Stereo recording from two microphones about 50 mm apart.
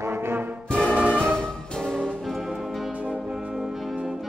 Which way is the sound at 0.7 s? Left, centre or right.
Centre.